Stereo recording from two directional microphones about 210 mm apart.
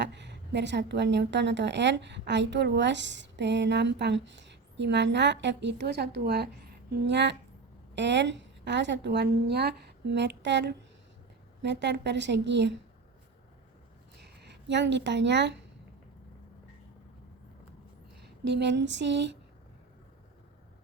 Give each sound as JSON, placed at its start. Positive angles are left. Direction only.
{"t": 0.0, "sound": "a woman's voice", "side_deg": -55}
{"t": 14.4, "sound": "a woman's voice", "side_deg": -55}
{"t": 18.2, "sound": "speech", "side_deg": -55}